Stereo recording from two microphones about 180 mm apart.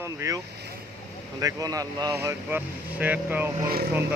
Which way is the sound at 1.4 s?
20° right (ahead or behind).